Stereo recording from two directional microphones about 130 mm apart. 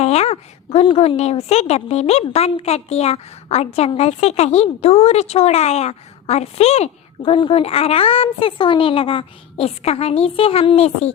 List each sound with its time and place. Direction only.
0.0 s a woman's voice: 55° left (ahead or behind)
7.2 s a woman's voice: 40° left (ahead or behind)